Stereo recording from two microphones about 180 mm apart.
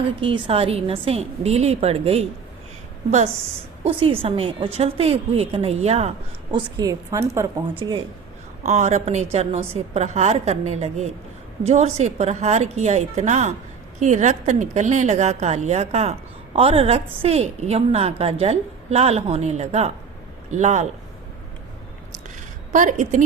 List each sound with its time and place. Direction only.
0.2 s a woman's voice: 30° right (ahead or behind)
3.8 s a woman's voice: 30° right (ahead or behind)
6.5 s a woman's voice: 20° right (ahead or behind)
7.8 s a woman's voice: 25° right (ahead or behind)
8.6 s a woman's voice: 40° right (ahead or behind)
22.7 s a woman's voice: 45° right (ahead or behind)